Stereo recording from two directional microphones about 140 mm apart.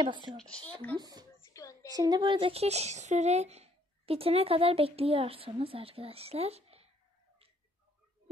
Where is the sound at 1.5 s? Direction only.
25° left (ahead or behind).